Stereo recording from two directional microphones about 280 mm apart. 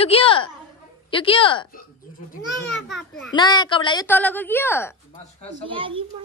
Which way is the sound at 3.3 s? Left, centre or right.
Centre.